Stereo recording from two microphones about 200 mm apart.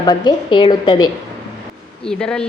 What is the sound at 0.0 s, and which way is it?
A woman's voice, 20° left (ahead or behind).